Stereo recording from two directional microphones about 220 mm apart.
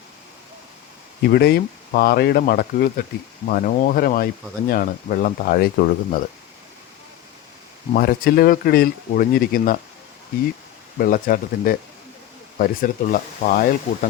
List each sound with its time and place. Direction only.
1.3 s speech: 45° left (ahead or behind)
7.9 s speech: 45° left (ahead or behind)
10.9 s speech: 40° left (ahead or behind)